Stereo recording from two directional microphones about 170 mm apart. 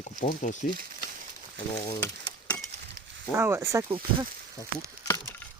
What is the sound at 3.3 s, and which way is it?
Speech, 15° right (ahead or behind).